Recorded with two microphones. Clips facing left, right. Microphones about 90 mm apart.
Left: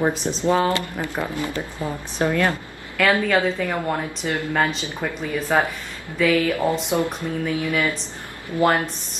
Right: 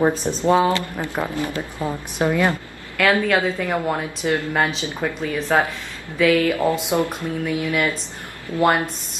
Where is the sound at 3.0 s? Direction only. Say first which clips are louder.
Right 1 dB; centre (ahead or behind).